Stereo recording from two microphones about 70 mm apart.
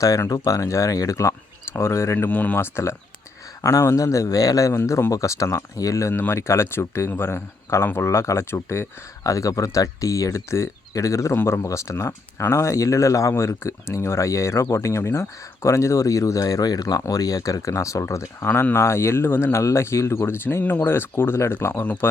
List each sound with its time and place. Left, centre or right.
0.2 s speech: left
2.1 s speech: left
2.6 s speech: left
3.6 s speech: left
4.8 s speech: left
18.4 s speech: left